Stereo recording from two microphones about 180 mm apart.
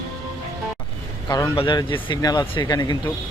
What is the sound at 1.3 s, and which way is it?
Speech, 20° left (ahead or behind).